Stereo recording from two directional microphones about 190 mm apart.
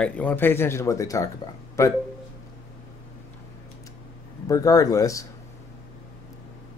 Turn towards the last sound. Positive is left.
turn(degrees=15)  # may be behind; listen again after turning